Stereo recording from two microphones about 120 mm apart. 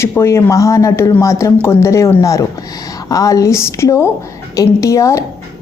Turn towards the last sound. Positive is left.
turn(degrees=25)  # may be behind; listen again after turning